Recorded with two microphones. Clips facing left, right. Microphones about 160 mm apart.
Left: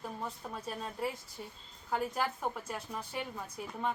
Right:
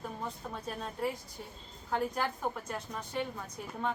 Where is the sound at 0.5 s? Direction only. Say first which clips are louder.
Right 1 dB; centre (ahead or behind).